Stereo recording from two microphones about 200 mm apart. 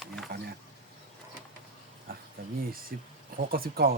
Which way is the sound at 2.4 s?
50° right (ahead or behind).